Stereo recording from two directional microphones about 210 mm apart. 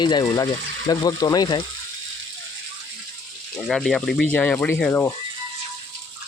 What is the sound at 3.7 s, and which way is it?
Speech, centre (ahead or behind).